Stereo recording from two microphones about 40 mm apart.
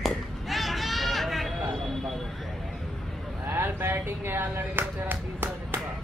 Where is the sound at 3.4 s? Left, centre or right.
Right.